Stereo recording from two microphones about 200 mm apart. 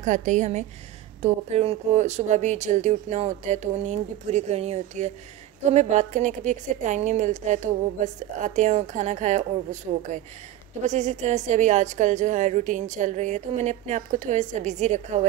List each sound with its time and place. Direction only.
0.0 s a woman's voice: 40° right (ahead or behind)